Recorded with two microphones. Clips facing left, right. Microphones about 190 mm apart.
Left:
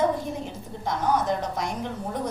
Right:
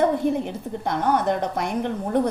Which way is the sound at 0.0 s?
60° right (ahead or behind).